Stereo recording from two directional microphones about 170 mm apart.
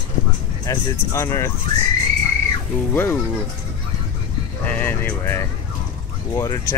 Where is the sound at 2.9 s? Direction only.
15° left (ahead or behind).